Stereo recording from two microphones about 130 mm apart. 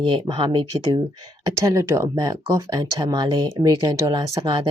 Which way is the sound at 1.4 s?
25° right (ahead or behind).